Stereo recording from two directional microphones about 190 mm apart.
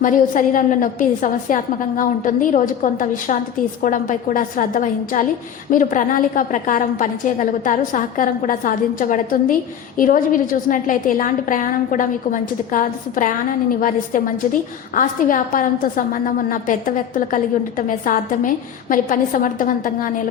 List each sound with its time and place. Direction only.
0.0 s a woman's voice: 45° left (ahead or behind)